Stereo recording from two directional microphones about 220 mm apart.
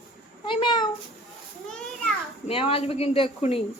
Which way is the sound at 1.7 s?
5° left (ahead or behind).